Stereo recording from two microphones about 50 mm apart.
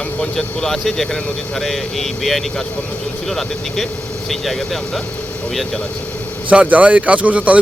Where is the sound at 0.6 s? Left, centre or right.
Centre.